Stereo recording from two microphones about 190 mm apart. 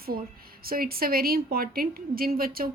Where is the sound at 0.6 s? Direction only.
50° right (ahead or behind).